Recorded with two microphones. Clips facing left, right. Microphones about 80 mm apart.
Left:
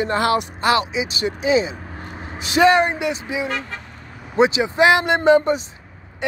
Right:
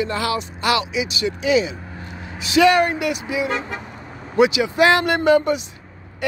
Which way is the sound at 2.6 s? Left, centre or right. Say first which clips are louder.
Left 2 dB; left.